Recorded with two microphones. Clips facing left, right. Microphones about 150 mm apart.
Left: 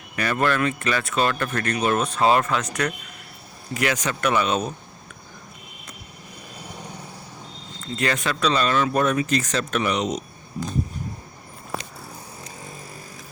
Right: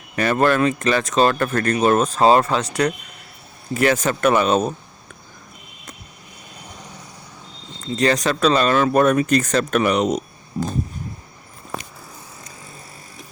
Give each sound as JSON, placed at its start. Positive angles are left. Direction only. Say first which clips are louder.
{"t": 0.2, "sound": "speech", "louder": "right 5 dB", "side_deg": -40}
{"t": 3.8, "sound": "speech", "louder": "right 6 dB", "side_deg": -45}
{"t": 7.9, "sound": "speech", "louder": "right 6 dB", "side_deg": -35}